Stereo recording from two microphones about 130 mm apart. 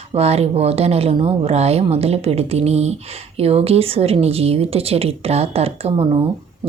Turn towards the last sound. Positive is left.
turn(degrees=-50)  # may be behind; listen again after turning